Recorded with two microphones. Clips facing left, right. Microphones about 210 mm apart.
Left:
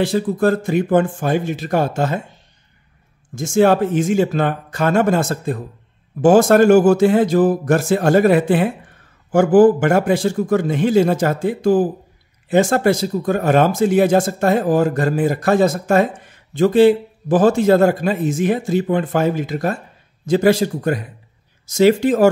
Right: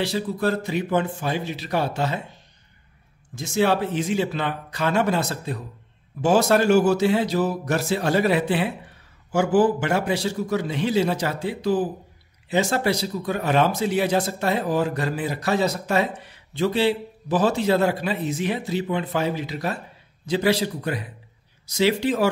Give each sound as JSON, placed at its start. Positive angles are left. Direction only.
{"t": 0.0, "sound": "speech", "side_deg": 50}
{"t": 3.3, "sound": "speech", "side_deg": 50}